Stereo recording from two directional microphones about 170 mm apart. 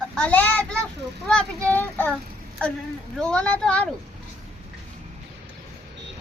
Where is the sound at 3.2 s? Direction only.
5° left (ahead or behind).